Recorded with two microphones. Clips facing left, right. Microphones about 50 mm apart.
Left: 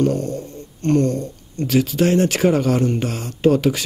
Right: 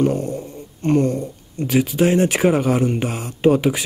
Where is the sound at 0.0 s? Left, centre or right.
Centre.